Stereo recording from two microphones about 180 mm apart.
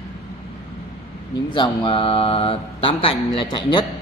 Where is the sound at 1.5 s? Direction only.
25° left (ahead or behind).